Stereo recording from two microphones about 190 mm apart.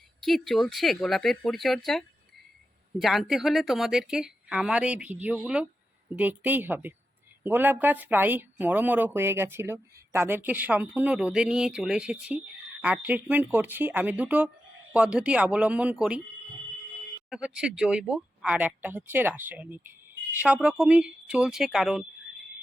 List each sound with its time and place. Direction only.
0.2 s speech: centre (ahead or behind)
17.2 s speech: 5° right (ahead or behind)